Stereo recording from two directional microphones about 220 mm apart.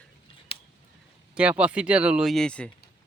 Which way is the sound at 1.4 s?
5° right (ahead or behind).